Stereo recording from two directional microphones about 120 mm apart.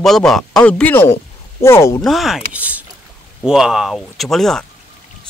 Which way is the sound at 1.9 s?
Centre (ahead or behind).